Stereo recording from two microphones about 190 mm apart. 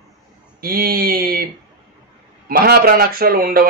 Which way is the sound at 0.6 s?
50° right (ahead or behind).